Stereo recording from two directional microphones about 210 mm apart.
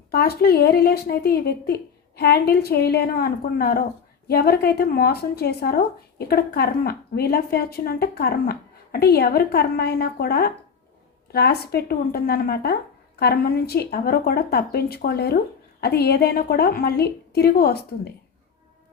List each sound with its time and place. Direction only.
0.1 s speech: 50° left (ahead or behind)